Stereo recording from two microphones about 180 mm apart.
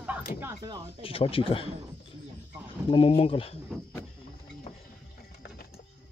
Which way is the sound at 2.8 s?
30° left (ahead or behind).